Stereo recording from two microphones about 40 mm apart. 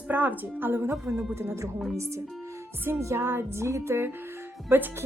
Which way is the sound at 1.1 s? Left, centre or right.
Centre.